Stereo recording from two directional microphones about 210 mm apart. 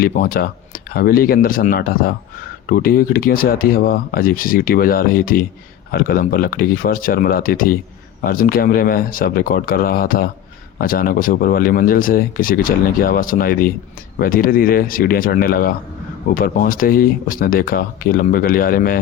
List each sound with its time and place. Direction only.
0.0 s speech: 45° left (ahead or behind)